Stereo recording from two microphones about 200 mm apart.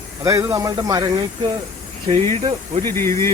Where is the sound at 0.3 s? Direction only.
15° right (ahead or behind).